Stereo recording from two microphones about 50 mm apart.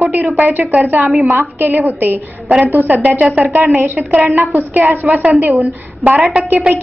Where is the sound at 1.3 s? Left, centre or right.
Right.